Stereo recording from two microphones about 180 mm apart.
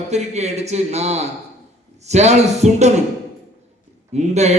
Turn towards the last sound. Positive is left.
turn(degrees=-40)  # may be behind; listen again after turning